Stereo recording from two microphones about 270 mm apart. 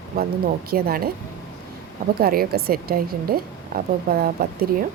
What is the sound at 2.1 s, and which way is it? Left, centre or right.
A woman's voice, right.